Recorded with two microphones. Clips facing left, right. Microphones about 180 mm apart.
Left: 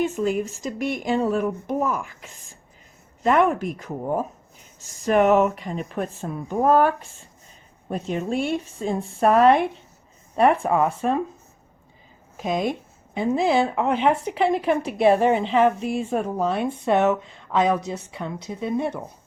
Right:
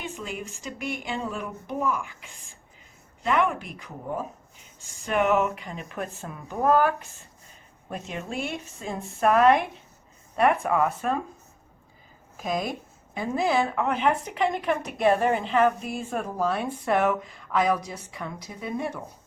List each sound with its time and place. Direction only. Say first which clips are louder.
0.0 s speech: left 12 dB; 45° left (ahead or behind)
12.4 s speech: left 4 dB; 25° left (ahead or behind)
15.4 s speech: left 3 dB; centre (ahead or behind)
16.0 s speech: left 1 dB; 25° left (ahead or behind)